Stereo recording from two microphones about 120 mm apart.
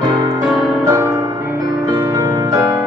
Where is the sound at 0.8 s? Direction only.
25° right (ahead or behind).